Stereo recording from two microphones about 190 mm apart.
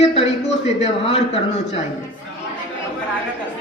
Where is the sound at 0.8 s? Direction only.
30° left (ahead or behind).